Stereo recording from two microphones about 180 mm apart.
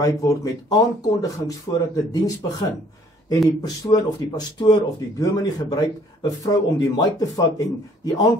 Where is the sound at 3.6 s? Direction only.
20° left (ahead or behind).